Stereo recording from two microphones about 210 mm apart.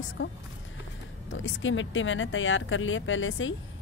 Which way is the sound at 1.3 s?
65° left (ahead or behind).